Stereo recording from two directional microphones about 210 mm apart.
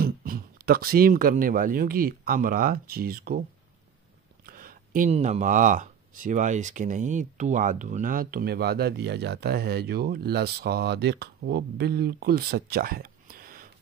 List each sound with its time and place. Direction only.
0.0 s speech: 45° right (ahead or behind)
4.5 s speech: 40° right (ahead or behind)